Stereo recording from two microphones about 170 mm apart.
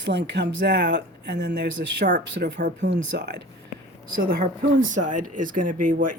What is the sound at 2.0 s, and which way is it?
Speech, 50° right (ahead or behind).